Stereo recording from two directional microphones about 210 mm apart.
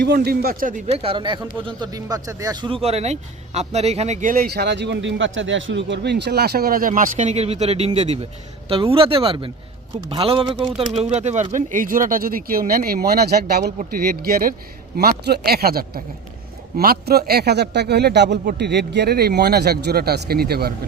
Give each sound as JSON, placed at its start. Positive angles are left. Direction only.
{"t": 0.0, "sound": "speech", "side_deg": -50}